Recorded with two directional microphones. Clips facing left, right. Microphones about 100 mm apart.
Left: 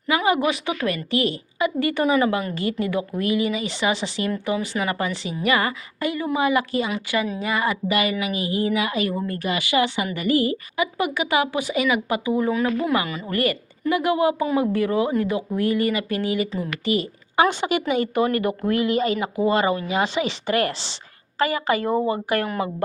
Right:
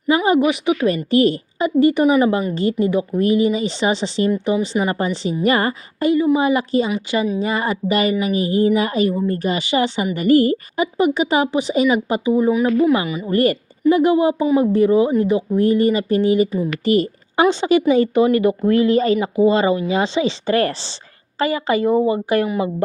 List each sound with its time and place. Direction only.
0.3 s a woman's voice: 15° right (ahead or behind)
0.9 s a woman's voice: 35° right (ahead or behind)
6.3 s a woman's voice: 25° right (ahead or behind)
10.2 s a woman's voice: 45° right (ahead or behind)
10.9 s speech: 25° right (ahead or behind)
12.4 s a woman's voice: 15° right (ahead or behind)
13.3 s a woman's voice: 35° right (ahead or behind)
16.8 s a woman's voice: 40° right (ahead or behind)
17.5 s speech: 30° right (ahead or behind)